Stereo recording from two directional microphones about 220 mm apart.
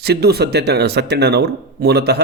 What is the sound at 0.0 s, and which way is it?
Speech, 45° right (ahead or behind).